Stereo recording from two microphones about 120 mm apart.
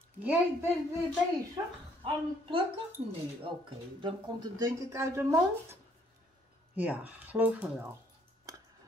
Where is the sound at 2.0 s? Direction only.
45° right (ahead or behind).